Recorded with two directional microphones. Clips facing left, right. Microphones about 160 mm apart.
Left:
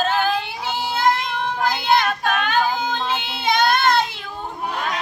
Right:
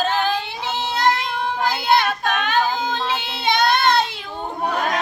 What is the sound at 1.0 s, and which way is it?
Child singing, centre (ahead or behind).